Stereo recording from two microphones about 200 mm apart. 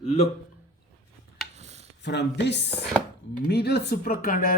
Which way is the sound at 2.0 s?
60° left (ahead or behind).